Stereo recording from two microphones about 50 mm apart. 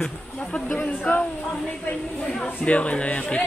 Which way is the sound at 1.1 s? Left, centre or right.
Left.